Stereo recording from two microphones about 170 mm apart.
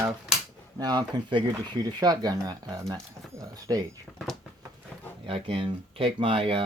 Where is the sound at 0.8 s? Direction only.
25° right (ahead or behind).